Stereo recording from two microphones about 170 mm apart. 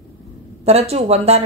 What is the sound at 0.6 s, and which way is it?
Speech, 40° right (ahead or behind).